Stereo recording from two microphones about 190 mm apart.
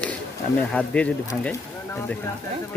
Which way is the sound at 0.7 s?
5° left (ahead or behind).